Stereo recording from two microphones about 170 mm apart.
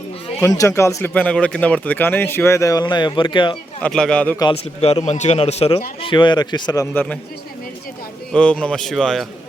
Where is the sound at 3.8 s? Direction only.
5° left (ahead or behind).